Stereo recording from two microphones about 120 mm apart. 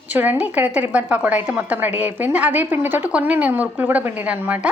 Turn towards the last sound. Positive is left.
turn(degrees=-10)  # may be behind; listen again after turning